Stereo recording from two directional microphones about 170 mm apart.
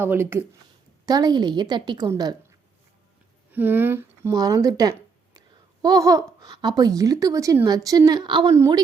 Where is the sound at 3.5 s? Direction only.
10° right (ahead or behind).